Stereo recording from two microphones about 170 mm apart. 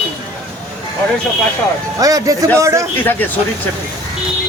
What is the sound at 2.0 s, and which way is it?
Speech, 20° right (ahead or behind).